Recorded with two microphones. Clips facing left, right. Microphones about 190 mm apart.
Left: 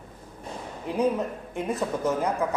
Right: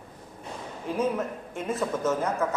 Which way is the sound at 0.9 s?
15° left (ahead or behind).